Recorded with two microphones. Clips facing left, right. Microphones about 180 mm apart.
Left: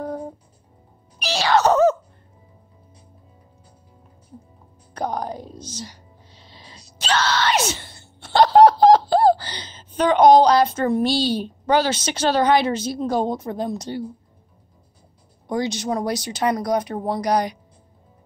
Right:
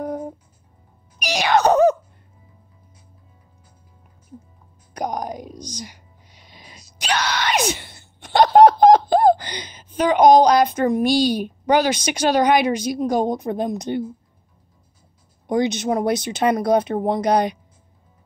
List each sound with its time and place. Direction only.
0.0 s music: 20° right (ahead or behind)
1.2 s wail: 15° right (ahead or behind)
4.9 s a sound: 15° right (ahead or behind)
7.0 s groan: 15° right (ahead or behind)
15.4 s speech: 20° right (ahead or behind)